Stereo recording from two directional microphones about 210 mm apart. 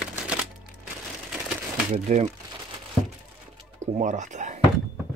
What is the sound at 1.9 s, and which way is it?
Speech, 30° right (ahead or behind).